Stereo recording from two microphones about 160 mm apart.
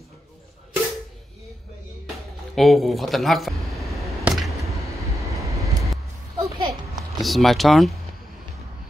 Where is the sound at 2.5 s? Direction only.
Centre (ahead or behind).